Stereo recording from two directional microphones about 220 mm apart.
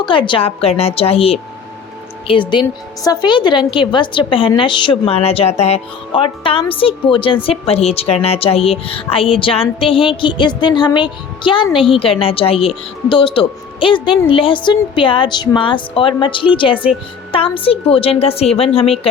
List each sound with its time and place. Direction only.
0.0 s a woman's voice: 20° left (ahead or behind)